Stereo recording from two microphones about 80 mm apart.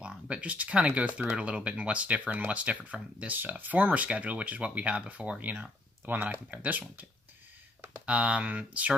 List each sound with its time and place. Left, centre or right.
0.0 s speech: centre
8.0 s speech: centre